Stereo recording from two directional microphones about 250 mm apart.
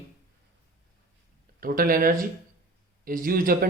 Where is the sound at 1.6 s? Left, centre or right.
Right.